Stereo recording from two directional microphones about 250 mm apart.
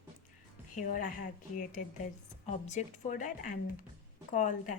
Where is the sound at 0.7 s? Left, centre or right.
Left.